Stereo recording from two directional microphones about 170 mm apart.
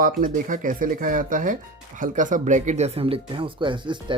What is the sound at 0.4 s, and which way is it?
Speech, 50° right (ahead or behind).